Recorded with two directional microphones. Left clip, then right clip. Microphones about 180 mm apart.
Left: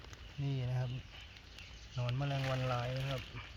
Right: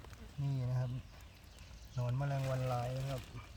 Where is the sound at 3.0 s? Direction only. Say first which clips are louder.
Left 3 dB; centre (ahead or behind).